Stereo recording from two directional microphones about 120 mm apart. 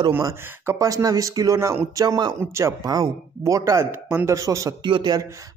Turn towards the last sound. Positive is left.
turn(degrees=-40)  # may be behind; listen again after turning